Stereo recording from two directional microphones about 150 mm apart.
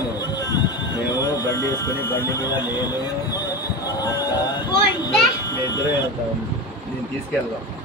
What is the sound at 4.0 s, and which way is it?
Music, 25° left (ahead or behind).